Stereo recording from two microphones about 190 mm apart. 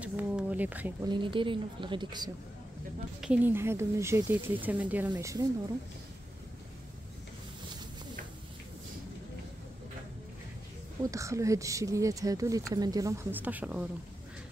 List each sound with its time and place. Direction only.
0.0 s a sound: 5° right (ahead or behind)
1.0 s speech: 25° right (ahead or behind)
3.2 s speech: 10° right (ahead or behind)
5.1 s speech: 20° right (ahead or behind)
11.1 s speech: 15° right (ahead or behind)